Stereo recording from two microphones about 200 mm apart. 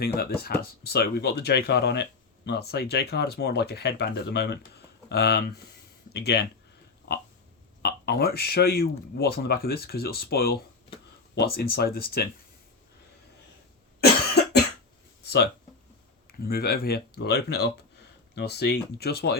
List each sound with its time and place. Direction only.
0.4 s speech: 50° left (ahead or behind)
7.8 s speech: 55° left (ahead or behind)
14.0 s cough: 55° left (ahead or behind)
16.2 s speech: 50° left (ahead or behind)